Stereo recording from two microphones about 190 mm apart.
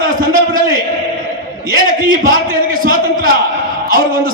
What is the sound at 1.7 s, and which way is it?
A man's voice, 50° right (ahead or behind).